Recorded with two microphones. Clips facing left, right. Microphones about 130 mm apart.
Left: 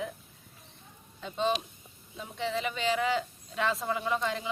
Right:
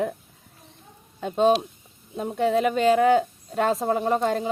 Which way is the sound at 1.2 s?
50° right (ahead or behind).